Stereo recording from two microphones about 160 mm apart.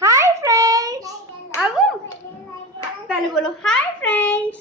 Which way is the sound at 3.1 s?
5° left (ahead or behind).